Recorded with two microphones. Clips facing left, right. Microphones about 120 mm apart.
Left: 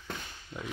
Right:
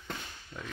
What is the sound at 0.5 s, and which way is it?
Speech, 25° left (ahead or behind).